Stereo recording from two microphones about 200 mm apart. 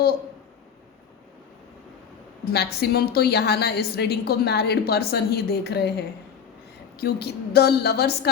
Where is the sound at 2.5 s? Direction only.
50° left (ahead or behind).